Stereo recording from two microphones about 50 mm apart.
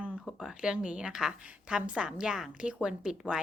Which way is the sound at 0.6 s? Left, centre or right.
Centre.